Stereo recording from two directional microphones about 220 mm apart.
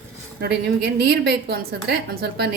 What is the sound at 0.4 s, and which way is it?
A woman's voice, 50° right (ahead or behind).